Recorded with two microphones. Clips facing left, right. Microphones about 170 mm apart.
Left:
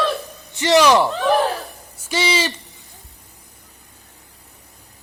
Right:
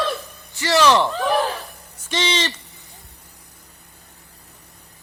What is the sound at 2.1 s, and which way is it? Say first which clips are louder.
Speech: left 2 dB; 10° left (ahead or behind).